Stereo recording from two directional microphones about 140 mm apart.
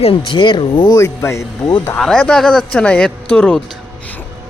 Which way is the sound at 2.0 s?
5° left (ahead or behind).